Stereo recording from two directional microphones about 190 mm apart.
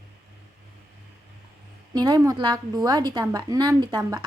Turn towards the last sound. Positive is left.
turn(degrees=-20)  # may be behind; listen again after turning